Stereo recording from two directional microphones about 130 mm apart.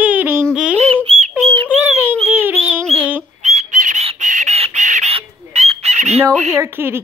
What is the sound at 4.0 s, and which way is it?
Chicken, 50° right (ahead or behind).